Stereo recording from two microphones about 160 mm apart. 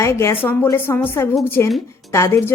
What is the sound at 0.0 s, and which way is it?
A woman's voice, 15° left (ahead or behind).